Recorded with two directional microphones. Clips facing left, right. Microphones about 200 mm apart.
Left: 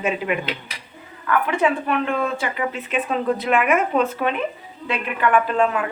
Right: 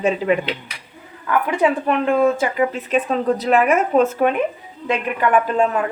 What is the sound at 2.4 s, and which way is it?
Speech, 40° right (ahead or behind).